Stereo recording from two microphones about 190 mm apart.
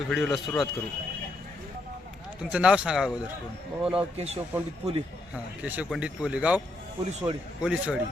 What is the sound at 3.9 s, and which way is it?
Speech, 35° right (ahead or behind).